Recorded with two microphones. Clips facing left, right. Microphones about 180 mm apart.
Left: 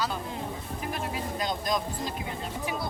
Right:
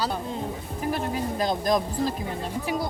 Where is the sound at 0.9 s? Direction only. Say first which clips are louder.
Right 7 dB; 35° right (ahead or behind).